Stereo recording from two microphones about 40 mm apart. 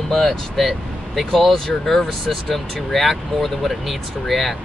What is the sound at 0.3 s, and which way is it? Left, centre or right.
Speech, centre.